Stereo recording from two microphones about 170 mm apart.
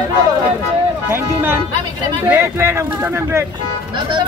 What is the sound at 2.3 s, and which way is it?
Speech, 15° right (ahead or behind).